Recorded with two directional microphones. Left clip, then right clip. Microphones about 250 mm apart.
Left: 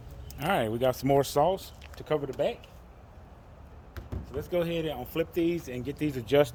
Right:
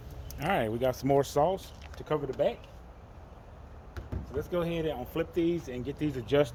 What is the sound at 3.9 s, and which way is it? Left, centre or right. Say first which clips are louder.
Speech: right 1 dB; left.